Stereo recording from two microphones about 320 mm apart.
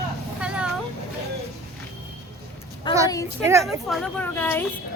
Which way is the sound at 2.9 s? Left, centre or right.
Centre.